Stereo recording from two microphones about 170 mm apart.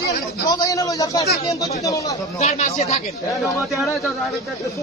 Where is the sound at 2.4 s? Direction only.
40° left (ahead or behind).